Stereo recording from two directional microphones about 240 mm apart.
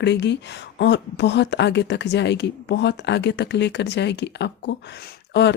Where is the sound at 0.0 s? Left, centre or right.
Left.